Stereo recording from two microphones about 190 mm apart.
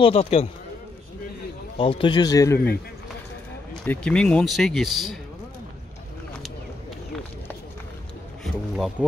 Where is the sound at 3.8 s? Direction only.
5° left (ahead or behind).